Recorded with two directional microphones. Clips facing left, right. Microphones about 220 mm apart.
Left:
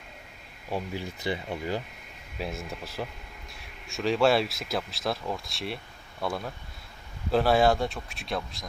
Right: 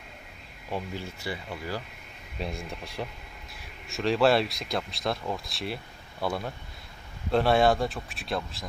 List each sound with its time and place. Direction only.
0.7 s speech: 15° left (ahead or behind)
2.4 s speech: centre (ahead or behind)